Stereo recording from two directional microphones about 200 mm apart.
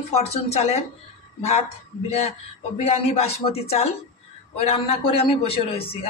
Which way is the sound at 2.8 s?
30° left (ahead or behind).